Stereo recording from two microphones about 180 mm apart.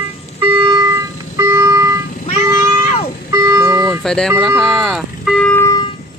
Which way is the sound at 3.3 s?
15° right (ahead or behind).